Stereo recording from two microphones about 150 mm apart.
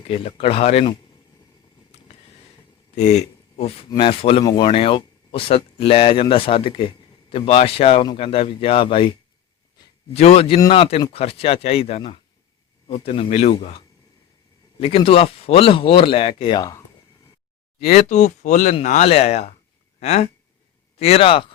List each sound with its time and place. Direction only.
0.3 s speech: 40° left (ahead or behind)
2.9 s speech: 50° left (ahead or behind)
10.2 s speech: 40° left (ahead or behind)
17.7 s speech: 50° left (ahead or behind)